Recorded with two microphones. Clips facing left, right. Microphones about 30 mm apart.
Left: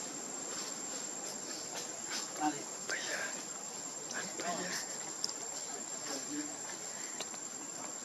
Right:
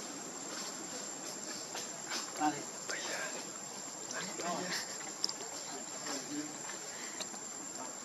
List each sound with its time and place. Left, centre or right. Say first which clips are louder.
2.1 s insect: right 1 dB; centre
2.9 s whispering: left 2 dB; centre
4.4 s speech: right 1 dB; centre
4.6 s a sound: right 1 dB; right